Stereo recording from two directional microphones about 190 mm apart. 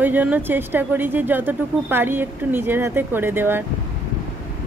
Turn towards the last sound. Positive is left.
turn(degrees=-10)  # may be behind; listen again after turning